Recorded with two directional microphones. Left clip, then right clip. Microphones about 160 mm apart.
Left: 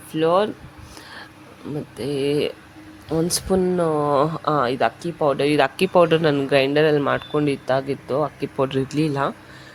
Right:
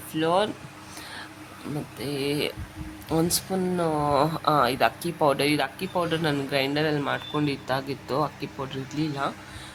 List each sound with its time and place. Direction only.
0.1 s speech: 30° left (ahead or behind)
2.0 s speech: 30° left (ahead or behind)
5.5 s speech: 55° left (ahead or behind); by 8.3 s 20° left (ahead or behind)
8.5 s speech: 50° left (ahead or behind)